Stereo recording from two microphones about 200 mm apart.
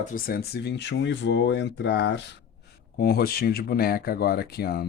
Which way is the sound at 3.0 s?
50° left (ahead or behind).